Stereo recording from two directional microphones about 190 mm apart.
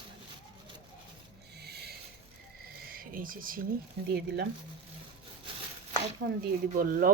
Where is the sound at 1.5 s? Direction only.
60° right (ahead or behind).